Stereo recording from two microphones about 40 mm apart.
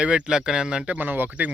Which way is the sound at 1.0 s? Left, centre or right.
Right.